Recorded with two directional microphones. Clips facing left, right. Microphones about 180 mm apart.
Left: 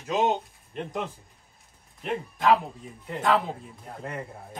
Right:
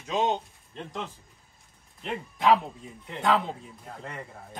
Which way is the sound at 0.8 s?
15° left (ahead or behind).